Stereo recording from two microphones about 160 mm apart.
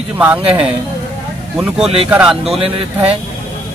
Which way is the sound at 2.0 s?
5° right (ahead or behind).